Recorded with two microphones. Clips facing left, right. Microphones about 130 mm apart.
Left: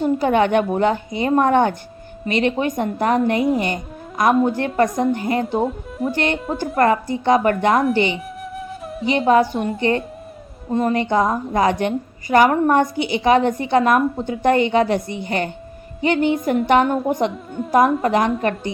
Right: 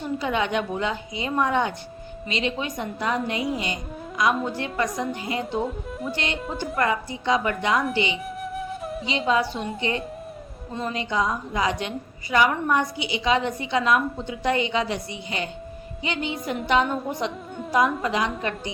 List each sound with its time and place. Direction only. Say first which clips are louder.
0.0 s a woman's voice: left 9 dB; 50° left (ahead or behind)
8.5 s flute: left 2 dB; centre (ahead or behind)
9.0 s a woman's voice: left 8 dB; 55° left (ahead or behind)
10.7 s a woman's voice: left 10 dB; 50° left (ahead or behind)